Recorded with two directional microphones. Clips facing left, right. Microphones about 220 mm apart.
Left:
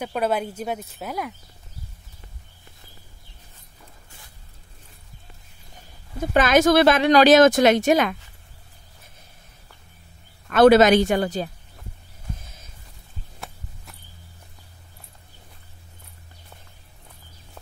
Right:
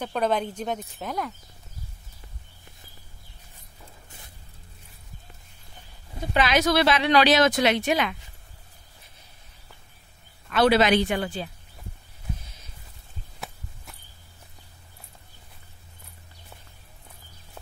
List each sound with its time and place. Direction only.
0.0 s speech: 5° left (ahead or behind)
6.3 s speech: 50° left (ahead or behind)
10.5 s speech: 45° left (ahead or behind)